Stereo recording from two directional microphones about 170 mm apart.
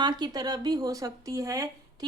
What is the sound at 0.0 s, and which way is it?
Speech, 25° right (ahead or behind).